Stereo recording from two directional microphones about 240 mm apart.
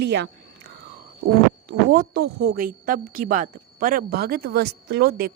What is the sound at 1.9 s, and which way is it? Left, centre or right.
A woman's voice, right.